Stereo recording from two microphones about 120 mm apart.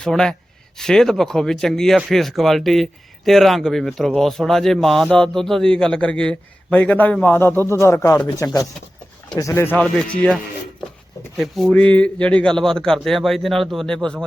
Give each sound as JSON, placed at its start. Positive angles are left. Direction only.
{"t": 0.0, "sound": "speech", "side_deg": 5}
{"t": 9.7, "sound": "speech", "side_deg": 5}
{"t": 11.7, "sound": "speech", "side_deg": 10}